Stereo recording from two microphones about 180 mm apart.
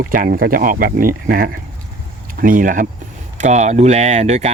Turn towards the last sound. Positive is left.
turn(degrees=-40)  # may be behind; listen again after turning